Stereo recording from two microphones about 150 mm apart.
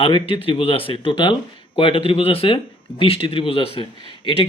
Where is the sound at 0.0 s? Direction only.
35° left (ahead or behind).